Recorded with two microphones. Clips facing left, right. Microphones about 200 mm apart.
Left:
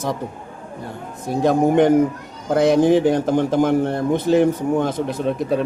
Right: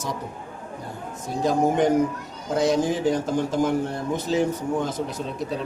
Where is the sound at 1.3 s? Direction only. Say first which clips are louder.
Left 5 dB; 60° left (ahead or behind).